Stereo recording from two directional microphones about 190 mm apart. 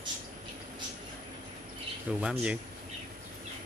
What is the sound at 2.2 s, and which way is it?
Speech, 5° right (ahead or behind).